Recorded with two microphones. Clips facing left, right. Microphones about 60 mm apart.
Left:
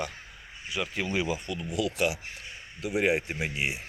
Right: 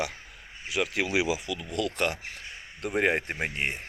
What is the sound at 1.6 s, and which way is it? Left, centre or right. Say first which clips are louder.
Speech: left 1 dB; right.